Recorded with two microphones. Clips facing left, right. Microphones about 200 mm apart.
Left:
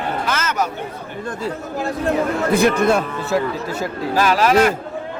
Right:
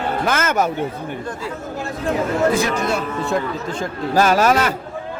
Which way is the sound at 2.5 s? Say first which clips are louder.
Left 5 dB; 55° left (ahead or behind).